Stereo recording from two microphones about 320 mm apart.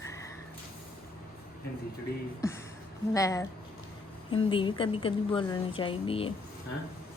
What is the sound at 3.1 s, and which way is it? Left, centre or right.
Speech, centre.